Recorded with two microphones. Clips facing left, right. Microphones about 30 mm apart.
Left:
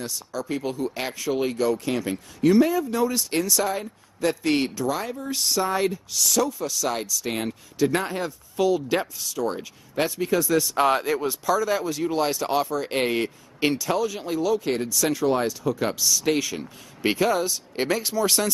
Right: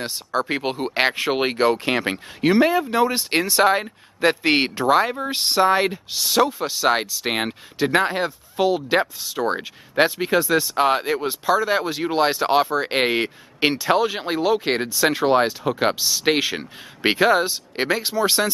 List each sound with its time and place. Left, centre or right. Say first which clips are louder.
0.0 s speech: right 7 dB; right